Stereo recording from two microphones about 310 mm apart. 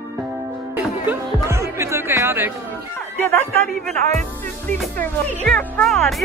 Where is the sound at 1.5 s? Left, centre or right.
Centre.